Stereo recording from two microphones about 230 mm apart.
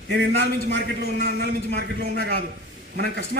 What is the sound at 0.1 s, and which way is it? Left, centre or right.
A man's voice, right.